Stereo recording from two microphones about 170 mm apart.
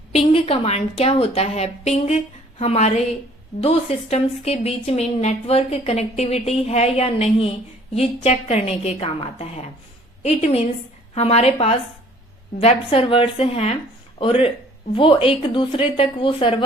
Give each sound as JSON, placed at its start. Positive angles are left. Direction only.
{"t": 0.1, "sound": "speech", "side_deg": 35}